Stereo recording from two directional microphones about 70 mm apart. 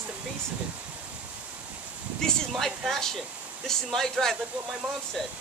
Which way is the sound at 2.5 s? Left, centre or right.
Centre.